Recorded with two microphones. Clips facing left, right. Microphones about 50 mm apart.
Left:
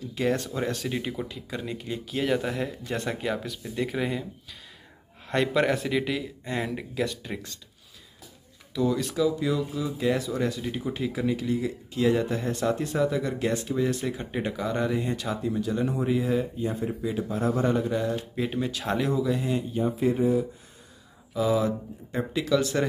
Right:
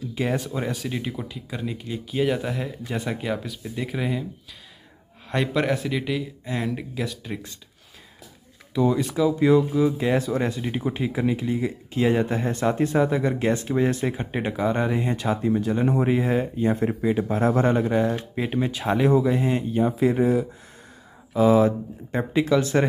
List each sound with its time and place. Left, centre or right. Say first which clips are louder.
0.1 s speech: even; centre
5.3 s speech: even; centre
8.7 s speech: right 4 dB; right
9.0 s speech: right 3 dB; centre
9.4 s speech: right 9 dB; right
17.0 s speech: right 5 dB; right
18.3 s speech: right 3 dB; right
19.0 s speech: right 9 dB; right
19.7 s speech: right 4 dB; right
21.3 s speech: right 7 dB; right